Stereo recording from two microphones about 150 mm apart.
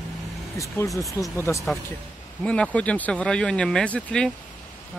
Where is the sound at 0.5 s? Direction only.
20° left (ahead or behind).